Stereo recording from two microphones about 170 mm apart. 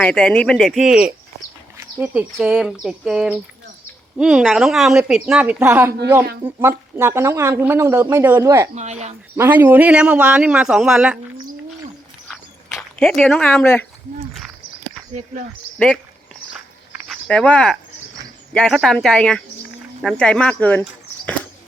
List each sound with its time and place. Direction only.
0.0 s a woman's voice: 5° left (ahead or behind); by 8.7 s 20° right (ahead or behind)
8.7 s speech: 40° right (ahead or behind)
9.4 s a man's voice: 10° right (ahead or behind)
12.3 s walk: centre (ahead or behind)
17.1 s a woman's voice: 5° left (ahead or behind)